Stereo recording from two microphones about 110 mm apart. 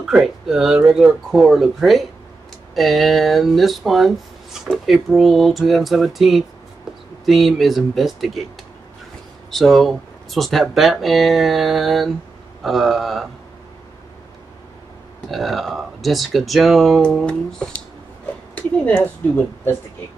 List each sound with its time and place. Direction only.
0.0 s speech: 5° right (ahead or behind)
9.5 s speech: centre (ahead or behind)
15.3 s speech: centre (ahead or behind)
18.5 s speech: 15° left (ahead or behind)